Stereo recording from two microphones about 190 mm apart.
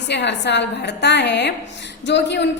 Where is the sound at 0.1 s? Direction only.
65° left (ahead or behind).